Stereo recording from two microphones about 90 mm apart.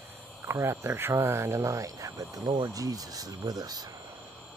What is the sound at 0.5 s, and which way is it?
Speech, 30° right (ahead or behind).